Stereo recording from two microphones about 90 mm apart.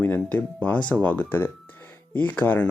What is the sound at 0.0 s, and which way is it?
Speech, 20° left (ahead or behind).